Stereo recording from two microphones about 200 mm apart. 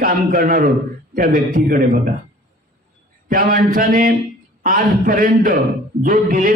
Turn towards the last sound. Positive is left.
turn(degrees=-45)  # may be behind; listen again after turning